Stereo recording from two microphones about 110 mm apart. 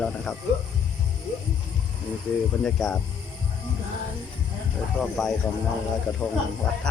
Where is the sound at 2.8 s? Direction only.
Centre (ahead or behind).